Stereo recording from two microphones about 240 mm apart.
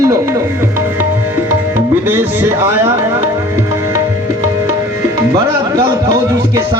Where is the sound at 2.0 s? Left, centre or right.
Centre.